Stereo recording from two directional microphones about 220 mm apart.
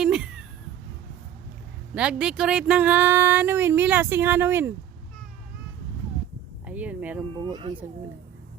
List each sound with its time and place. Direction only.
0.0 s a sound: 5° right (ahead or behind)
2.0 s speech: 5° right (ahead or behind)
6.7 s speech: 5° right (ahead or behind)
7.4 s speech: 20° right (ahead or behind)